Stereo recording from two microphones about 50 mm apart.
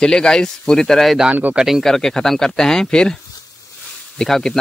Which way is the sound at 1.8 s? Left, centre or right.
Centre.